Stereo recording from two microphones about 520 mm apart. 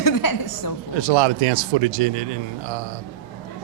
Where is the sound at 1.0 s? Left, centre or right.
Right.